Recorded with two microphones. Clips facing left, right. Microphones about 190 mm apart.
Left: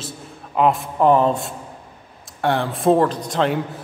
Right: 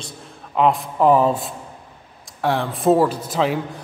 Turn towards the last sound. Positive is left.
turn(degrees=-5)  # may be behind; listen again after turning